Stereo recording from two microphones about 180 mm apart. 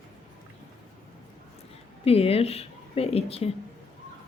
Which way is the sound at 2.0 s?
35° left (ahead or behind).